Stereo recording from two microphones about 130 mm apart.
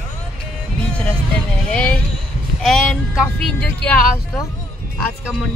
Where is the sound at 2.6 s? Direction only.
5° left (ahead or behind).